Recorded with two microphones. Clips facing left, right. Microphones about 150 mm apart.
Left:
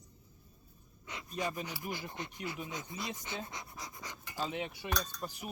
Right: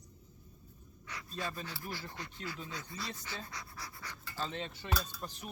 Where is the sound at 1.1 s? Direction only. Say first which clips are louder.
Left 3 dB; 20° left (ahead or behind).